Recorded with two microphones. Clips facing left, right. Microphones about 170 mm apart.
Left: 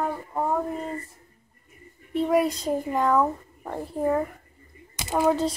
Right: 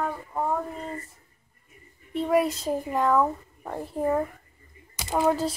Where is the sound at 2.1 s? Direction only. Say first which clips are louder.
Left 1 dB; centre (ahead or behind).